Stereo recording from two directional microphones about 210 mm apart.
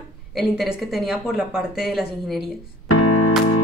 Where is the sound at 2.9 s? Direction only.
90° left.